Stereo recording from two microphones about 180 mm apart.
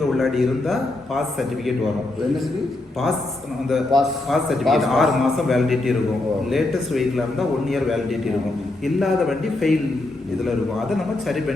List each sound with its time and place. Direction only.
0.2 s a man's voice: centre (ahead or behind)
3.7 s a man's voice: centre (ahead or behind)
10.9 s a man's voice: centre (ahead or behind)